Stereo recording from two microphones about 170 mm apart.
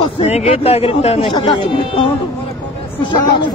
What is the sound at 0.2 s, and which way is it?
Speech, 35° left (ahead or behind).